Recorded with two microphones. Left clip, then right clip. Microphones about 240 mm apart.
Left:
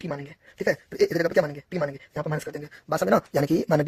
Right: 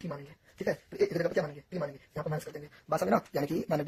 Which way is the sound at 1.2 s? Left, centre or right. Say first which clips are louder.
Left 8 dB; left.